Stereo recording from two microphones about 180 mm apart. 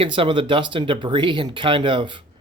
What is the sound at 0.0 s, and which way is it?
Speech, 30° right (ahead or behind).